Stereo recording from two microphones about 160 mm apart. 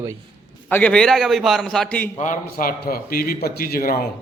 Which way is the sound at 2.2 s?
60° left (ahead or behind).